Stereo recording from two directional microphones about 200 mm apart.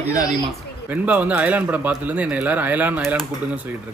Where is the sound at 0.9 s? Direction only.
10° right (ahead or behind).